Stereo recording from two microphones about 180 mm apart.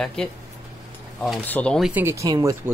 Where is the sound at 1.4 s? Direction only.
10° left (ahead or behind).